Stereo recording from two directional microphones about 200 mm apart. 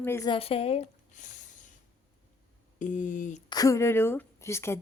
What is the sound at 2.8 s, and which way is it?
Speech, 40° left (ahead or behind).